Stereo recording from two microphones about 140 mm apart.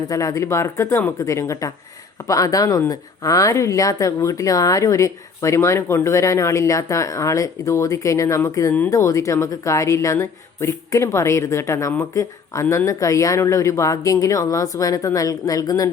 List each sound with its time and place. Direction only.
0.1 s speech: 25° left (ahead or behind)